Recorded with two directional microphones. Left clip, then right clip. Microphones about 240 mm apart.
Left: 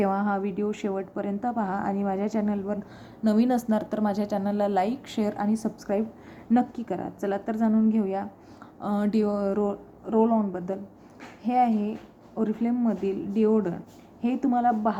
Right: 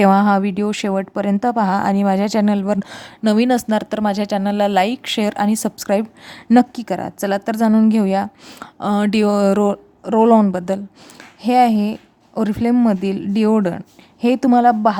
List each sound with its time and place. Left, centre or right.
0.0 s a woman's voice: right